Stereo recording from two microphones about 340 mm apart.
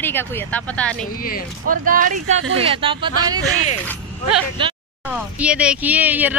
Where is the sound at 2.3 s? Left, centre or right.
Right.